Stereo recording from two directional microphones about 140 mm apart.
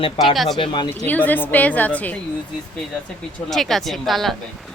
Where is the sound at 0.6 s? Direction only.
35° left (ahead or behind).